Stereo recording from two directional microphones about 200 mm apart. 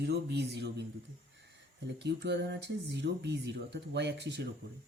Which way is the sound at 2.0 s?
60° right (ahead or behind).